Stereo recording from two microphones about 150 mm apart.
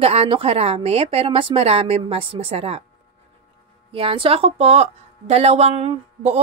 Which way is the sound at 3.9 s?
35° right (ahead or behind).